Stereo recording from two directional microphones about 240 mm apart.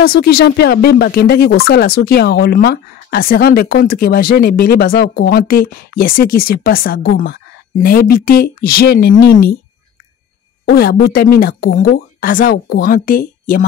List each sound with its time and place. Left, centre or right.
0.0 s speech: left
10.6 s speech: left